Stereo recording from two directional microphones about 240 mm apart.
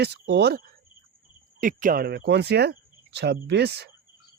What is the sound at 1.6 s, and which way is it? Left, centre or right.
Speech, right.